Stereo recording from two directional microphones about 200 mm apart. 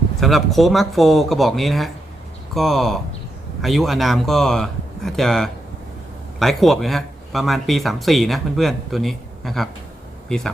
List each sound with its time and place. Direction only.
0.2 s speech: centre (ahead or behind)